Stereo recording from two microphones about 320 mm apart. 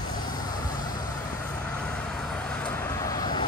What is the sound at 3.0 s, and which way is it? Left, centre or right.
Vehicle, centre.